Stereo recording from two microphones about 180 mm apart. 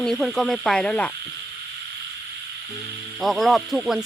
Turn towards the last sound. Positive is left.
turn(degrees=0)  # may be behind; listen again after turning